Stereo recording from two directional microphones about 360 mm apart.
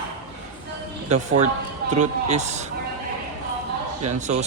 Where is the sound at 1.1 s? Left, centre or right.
Centre.